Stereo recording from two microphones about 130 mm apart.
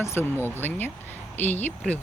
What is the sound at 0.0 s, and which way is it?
Speech, 20° left (ahead or behind).